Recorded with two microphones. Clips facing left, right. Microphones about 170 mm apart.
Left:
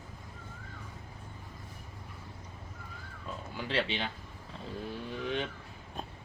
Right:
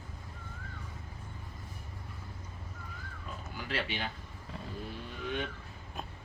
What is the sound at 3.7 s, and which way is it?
Speech, 25° left (ahead or behind).